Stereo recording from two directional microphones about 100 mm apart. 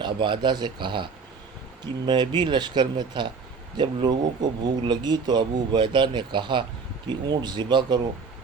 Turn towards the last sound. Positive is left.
turn(degrees=-45)  # may be behind; listen again after turning